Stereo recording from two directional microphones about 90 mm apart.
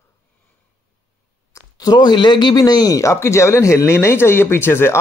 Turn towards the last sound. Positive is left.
turn(degrees=25)  # may be behind; listen again after turning